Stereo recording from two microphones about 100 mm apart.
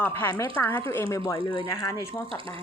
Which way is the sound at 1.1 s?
35° left (ahead or behind).